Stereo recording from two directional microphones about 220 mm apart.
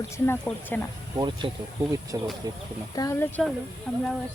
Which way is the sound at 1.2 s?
20° right (ahead or behind).